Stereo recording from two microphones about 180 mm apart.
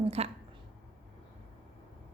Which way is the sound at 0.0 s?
35° right (ahead or behind).